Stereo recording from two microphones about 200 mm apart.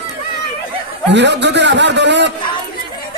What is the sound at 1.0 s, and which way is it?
A man's voice, 60° right (ahead or behind).